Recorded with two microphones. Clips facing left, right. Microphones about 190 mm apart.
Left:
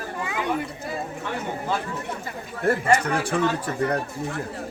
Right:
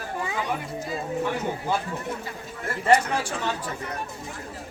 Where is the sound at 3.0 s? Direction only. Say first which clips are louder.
Left 5 dB; 60° left (ahead or behind).